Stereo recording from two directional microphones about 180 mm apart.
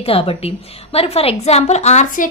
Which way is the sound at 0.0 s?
30° left (ahead or behind).